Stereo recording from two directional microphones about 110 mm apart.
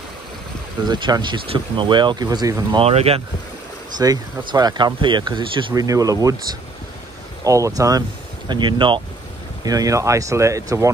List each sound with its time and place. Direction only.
0.8 s speech: 45° right (ahead or behind)
2.8 s speech: 70° right (ahead or behind)
4.0 s speech: 35° right (ahead or behind)
5.8 s speech: 30° right (ahead or behind)
8.5 s speech: 45° right (ahead or behind)
9.7 s speech: 30° right (ahead or behind)